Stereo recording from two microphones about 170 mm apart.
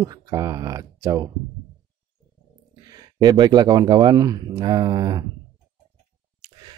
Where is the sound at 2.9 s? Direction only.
20° right (ahead or behind).